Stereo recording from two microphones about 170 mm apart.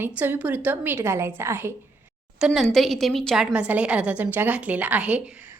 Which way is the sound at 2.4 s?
Centre (ahead or behind).